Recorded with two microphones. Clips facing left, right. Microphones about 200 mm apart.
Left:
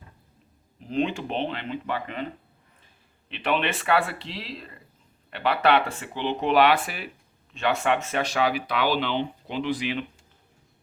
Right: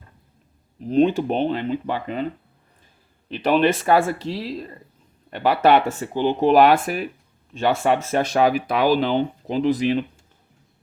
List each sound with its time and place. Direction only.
0.8 s speech: 40° right (ahead or behind)
3.2 s speech: 40° right (ahead or behind)